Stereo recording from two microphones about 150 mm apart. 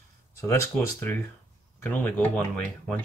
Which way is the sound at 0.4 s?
20° left (ahead or behind).